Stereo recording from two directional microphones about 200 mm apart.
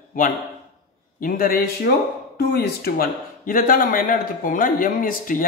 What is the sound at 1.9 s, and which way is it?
Speech, 55° left (ahead or behind).